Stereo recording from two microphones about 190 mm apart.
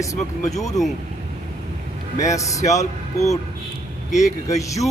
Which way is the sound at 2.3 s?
15° left (ahead or behind).